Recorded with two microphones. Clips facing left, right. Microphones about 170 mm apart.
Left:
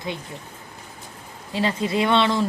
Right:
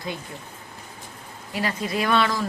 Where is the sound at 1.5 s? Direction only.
25° left (ahead or behind).